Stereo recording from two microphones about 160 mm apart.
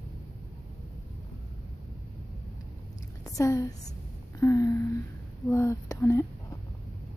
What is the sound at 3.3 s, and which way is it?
A woman's voice, 20° left (ahead or behind).